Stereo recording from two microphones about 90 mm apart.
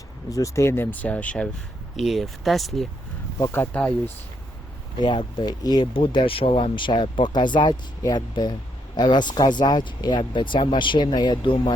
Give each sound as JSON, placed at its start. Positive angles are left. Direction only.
{"t": 0.3, "sound": "speech", "side_deg": 40}
{"t": 2.0, "sound": "speech", "side_deg": 0}
{"t": 3.5, "sound": "speech", "side_deg": 25}
{"t": 4.9, "sound": "speech", "side_deg": 60}
{"t": 5.9, "sound": "speech", "side_deg": 70}